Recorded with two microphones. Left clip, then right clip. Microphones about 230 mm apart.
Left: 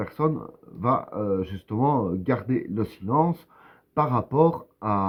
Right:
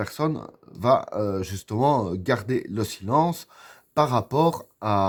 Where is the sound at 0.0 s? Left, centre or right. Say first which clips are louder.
Left 1 dB; right.